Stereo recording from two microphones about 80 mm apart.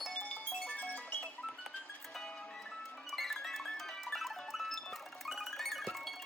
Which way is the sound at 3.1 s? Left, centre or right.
Centre.